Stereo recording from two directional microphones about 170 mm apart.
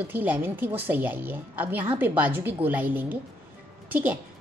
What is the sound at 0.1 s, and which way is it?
A woman's voice, 10° right (ahead or behind).